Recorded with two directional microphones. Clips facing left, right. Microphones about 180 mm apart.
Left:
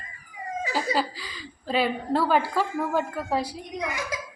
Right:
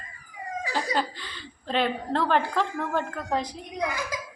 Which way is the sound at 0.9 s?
5° left (ahead or behind).